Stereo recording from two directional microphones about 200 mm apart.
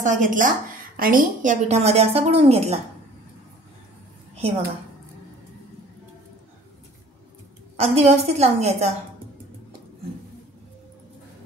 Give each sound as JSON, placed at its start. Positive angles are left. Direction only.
{"t": 0.0, "sound": "a woman's voice", "side_deg": -40}
{"t": 4.4, "sound": "a woman's voice", "side_deg": -30}
{"t": 7.7, "sound": "a woman's voice", "side_deg": -30}